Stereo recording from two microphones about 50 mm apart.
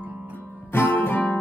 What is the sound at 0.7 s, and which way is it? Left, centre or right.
Guitar, left.